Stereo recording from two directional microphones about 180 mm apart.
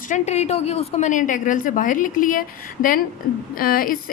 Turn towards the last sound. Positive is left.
turn(degrees=50)  # may be behind; listen again after turning